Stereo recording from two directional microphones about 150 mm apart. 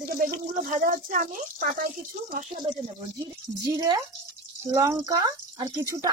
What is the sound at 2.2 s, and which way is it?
Speech, 50° right (ahead or behind).